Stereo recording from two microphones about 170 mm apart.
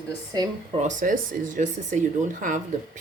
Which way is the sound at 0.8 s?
50° right (ahead or behind).